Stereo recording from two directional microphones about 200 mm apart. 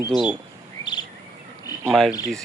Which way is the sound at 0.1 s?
5° right (ahead or behind).